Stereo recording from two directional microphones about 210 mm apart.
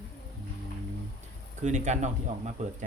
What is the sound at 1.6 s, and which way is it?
Speech, 35° right (ahead or behind).